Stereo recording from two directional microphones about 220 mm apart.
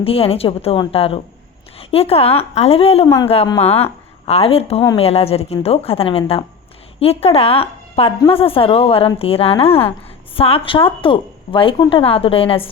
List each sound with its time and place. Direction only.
0.0 s a woman's voice: 25° left (ahead or behind)